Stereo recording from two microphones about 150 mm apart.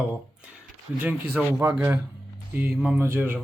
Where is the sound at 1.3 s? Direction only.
10° right (ahead or behind).